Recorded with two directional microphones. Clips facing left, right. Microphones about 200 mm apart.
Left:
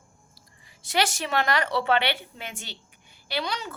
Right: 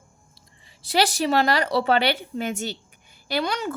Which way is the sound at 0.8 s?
35° right (ahead or behind).